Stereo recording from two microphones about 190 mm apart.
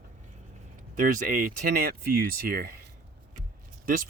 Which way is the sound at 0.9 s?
45° right (ahead or behind).